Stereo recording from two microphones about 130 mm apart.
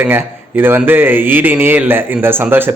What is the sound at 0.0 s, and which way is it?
A man's voice, 15° right (ahead or behind).